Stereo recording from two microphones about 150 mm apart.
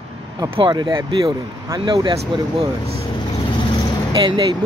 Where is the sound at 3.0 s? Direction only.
35° left (ahead or behind).